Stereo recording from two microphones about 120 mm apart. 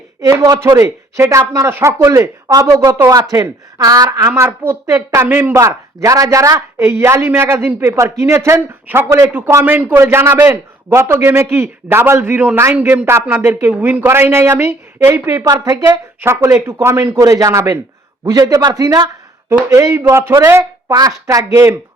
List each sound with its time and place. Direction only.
0.2 s speech: 30° right (ahead or behind)
4.3 s speech: 20° right (ahead or behind)